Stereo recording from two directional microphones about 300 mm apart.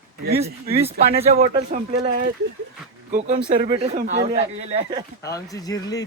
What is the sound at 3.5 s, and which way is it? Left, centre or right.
Speech, centre.